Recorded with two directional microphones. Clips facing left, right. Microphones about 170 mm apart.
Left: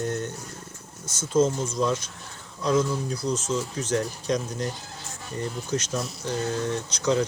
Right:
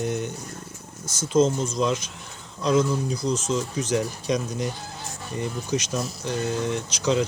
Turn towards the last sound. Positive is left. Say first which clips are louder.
# right 1 dB
turn(degrees=-15)  # may be behind; listen again after turning